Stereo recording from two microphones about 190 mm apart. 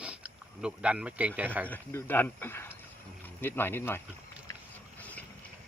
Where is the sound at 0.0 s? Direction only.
5° right (ahead or behind).